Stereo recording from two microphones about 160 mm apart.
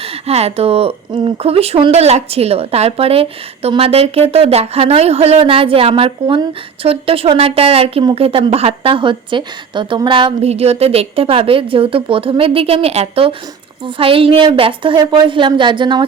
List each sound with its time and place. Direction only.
0.0 s speech: 40° right (ahead or behind)